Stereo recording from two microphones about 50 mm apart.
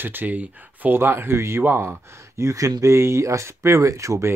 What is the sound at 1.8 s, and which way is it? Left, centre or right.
Speech, right.